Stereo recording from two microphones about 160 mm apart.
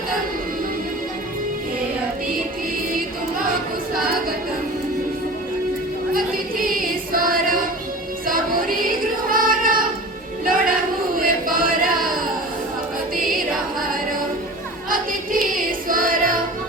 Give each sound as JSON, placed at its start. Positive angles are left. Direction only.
{"t": 8.3, "sound": "child singing", "side_deg": -60}
{"t": 10.4, "sound": "music", "side_deg": -60}
{"t": 11.2, "sound": "chant", "side_deg": -60}
{"t": 14.8, "sound": "child singing", "side_deg": -60}
{"t": 15.9, "sound": "music", "side_deg": -60}